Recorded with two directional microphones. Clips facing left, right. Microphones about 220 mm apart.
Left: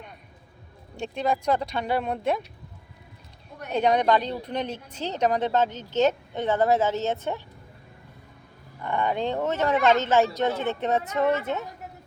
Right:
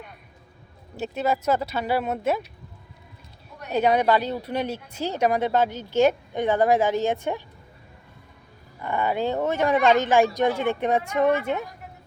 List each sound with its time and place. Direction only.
0.9 s speech: 5° right (ahead or behind)
3.7 s speech: 5° right (ahead or behind)
8.8 s speech: 10° right (ahead or behind)